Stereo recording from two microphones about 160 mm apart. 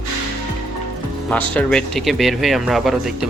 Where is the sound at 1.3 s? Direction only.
5° left (ahead or behind).